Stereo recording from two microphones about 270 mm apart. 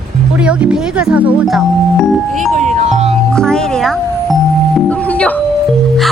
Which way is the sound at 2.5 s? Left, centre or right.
Right.